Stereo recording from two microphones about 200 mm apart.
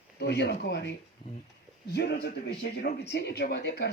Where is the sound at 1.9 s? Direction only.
55° left (ahead or behind).